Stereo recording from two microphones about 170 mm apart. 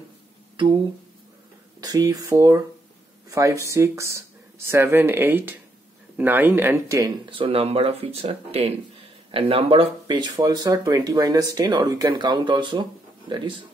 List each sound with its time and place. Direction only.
1.8 s speech: 20° right (ahead or behind)
7.2 s speech: 30° right (ahead or behind)